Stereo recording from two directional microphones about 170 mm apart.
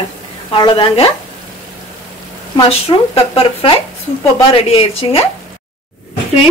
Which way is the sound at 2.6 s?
35° left (ahead or behind).